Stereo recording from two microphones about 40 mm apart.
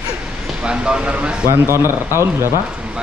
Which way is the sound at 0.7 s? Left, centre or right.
Right.